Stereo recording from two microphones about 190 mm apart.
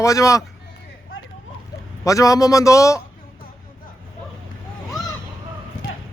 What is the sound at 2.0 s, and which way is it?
Speech, 15° left (ahead or behind).